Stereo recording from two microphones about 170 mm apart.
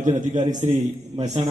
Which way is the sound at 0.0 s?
45° right (ahead or behind).